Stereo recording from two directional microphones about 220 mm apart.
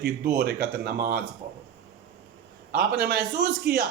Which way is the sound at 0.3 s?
45° right (ahead or behind).